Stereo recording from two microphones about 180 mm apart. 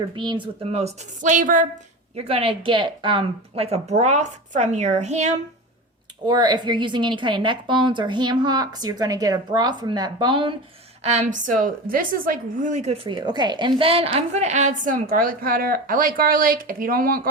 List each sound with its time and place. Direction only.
0.2 s speech: 25° right (ahead or behind); by 1.6 s 45° right (ahead or behind)
2.1 s speech: 35° right (ahead or behind)
6.2 s a woman's voice: 25° right (ahead or behind)
11.0 s a woman's voice: 40° right (ahead or behind)
13.1 s a woman's voice: 25° right (ahead or behind); by 17.2 s 55° right (ahead or behind)